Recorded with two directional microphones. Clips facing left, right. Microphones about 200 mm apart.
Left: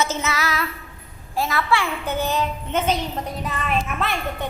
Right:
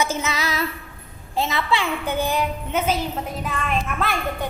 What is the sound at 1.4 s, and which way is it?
A woman's voice, 20° right (ahead or behind).